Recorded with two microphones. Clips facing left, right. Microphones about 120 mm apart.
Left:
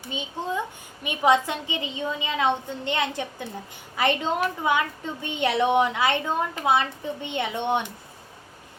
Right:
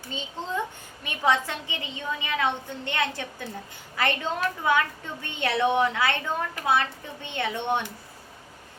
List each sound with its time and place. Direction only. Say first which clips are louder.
0.1 s a child's voice: left 2 dB; 15° left (ahead or behind)